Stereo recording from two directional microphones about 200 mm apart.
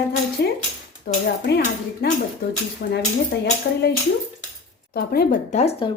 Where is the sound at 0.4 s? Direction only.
55° left (ahead or behind).